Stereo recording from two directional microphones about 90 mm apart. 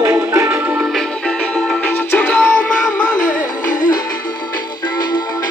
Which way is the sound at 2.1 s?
15° left (ahead or behind).